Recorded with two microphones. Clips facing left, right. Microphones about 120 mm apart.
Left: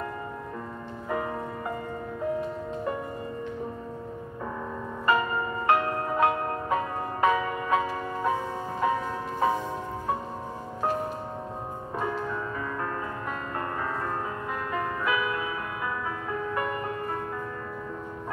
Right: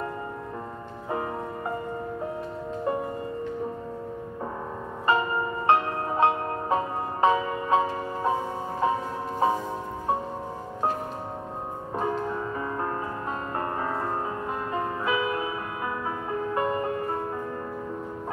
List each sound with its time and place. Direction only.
5.0 s music: 30° right (ahead or behind)
12.0 s music: 30° right (ahead or behind)
14.7 s music: 25° right (ahead or behind)